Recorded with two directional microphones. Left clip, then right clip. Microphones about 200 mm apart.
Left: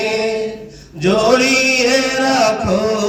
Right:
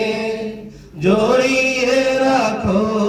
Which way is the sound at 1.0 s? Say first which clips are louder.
Left 2 dB; 45° left (ahead or behind).